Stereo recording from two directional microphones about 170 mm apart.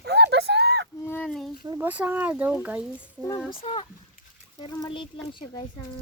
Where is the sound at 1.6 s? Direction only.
20° right (ahead or behind).